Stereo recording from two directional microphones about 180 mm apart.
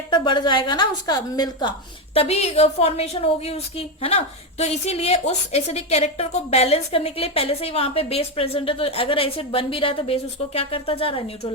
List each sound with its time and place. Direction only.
0.1 s a woman's voice: 25° left (ahead or behind)
2.1 s a woman's voice: 35° left (ahead or behind)